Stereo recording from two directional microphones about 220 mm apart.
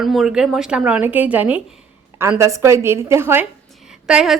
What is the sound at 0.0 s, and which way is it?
A woman's voice, centre (ahead or behind).